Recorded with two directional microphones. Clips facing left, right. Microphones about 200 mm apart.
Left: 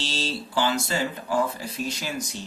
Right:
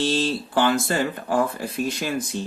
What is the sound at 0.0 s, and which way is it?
Speech, 55° right (ahead or behind).